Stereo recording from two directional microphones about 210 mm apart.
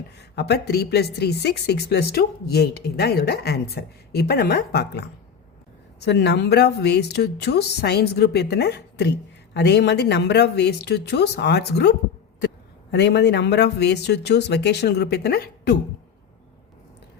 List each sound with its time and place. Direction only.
0.2 s a woman's voice: 50° left (ahead or behind)
6.1 s a woman's voice: 55° left (ahead or behind)